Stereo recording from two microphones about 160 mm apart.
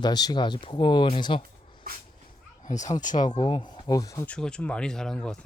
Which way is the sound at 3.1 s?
25° left (ahead or behind).